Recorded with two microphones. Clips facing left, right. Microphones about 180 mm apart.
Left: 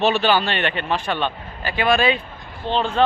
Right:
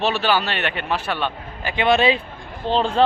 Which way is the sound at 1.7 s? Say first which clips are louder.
Right 1 dB; 25° right (ahead or behind).